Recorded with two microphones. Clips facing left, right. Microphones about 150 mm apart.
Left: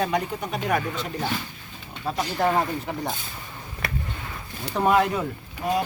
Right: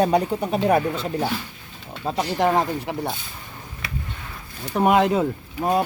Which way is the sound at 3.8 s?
55° left (ahead or behind).